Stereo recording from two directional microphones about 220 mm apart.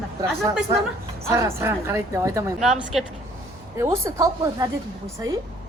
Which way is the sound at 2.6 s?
Centre (ahead or behind).